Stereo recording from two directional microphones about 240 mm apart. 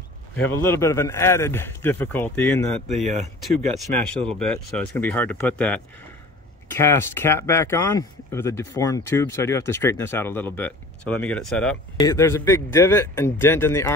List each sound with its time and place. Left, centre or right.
0.4 s speech: centre
3.9 s speech: right
4.4 s speech: centre